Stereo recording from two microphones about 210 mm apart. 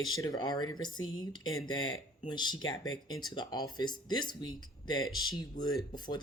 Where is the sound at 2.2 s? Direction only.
20° left (ahead or behind).